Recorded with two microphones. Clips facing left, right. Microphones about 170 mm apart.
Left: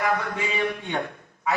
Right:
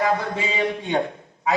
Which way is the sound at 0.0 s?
20° right (ahead or behind).